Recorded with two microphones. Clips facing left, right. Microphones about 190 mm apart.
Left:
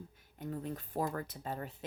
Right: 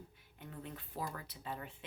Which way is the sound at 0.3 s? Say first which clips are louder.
Left 8 dB; 40° left (ahead or behind).